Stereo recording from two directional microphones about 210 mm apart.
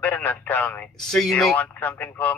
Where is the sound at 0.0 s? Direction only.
10° left (ahead or behind).